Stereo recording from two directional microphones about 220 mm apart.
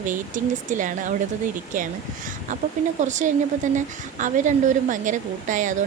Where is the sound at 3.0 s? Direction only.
35° right (ahead or behind).